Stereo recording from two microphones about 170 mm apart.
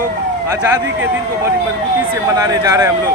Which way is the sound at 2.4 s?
20° right (ahead or behind).